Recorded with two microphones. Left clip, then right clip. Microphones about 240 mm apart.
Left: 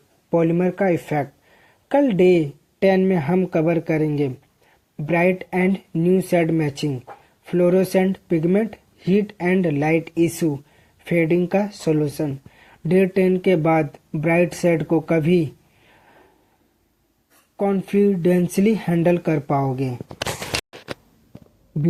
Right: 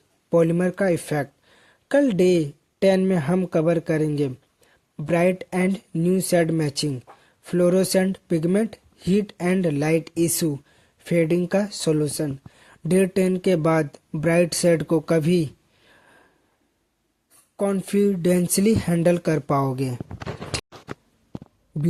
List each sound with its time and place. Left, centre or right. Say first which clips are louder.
0.3 s speech: left 1 dB; right
17.6 s speech: left 3 dB; right